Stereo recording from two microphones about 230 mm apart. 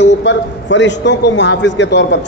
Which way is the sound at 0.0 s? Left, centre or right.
Left.